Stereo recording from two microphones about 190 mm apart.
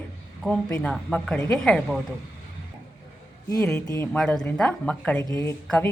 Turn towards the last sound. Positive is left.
turn(degrees=5)  # may be behind; listen again after turning